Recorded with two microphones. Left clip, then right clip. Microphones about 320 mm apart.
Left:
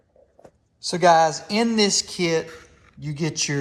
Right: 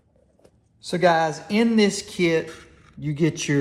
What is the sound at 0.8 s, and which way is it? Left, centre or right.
Speech, centre.